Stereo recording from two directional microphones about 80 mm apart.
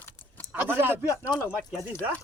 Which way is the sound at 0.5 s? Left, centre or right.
Right.